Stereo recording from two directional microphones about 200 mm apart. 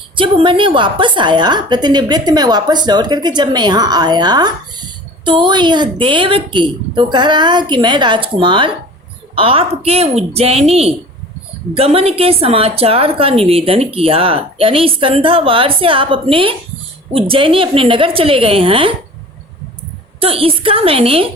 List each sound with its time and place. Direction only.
0.2 s a woman's voice: 25° right (ahead or behind)
20.1 s a woman's voice: 30° right (ahead or behind)